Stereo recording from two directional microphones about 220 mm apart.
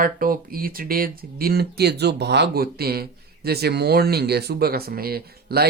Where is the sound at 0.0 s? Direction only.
40° right (ahead or behind).